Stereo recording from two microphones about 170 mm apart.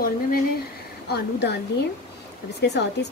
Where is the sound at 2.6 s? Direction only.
85° left.